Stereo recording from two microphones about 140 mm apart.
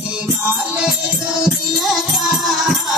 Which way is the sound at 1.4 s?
Centre (ahead or behind).